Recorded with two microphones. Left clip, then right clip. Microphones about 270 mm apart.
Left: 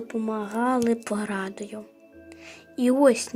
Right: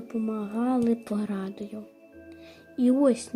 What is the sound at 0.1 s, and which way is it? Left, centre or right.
Speech, left.